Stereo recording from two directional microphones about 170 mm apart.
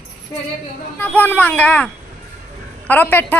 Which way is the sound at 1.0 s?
10° left (ahead or behind).